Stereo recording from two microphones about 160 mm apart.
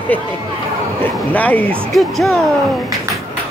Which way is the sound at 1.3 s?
10° left (ahead or behind).